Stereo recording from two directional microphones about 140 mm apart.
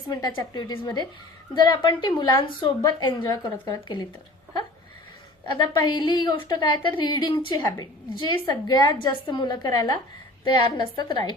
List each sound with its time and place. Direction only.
0.1 s a woman's voice: 30° left (ahead or behind)
5.5 s a woman's voice: 35° left (ahead or behind)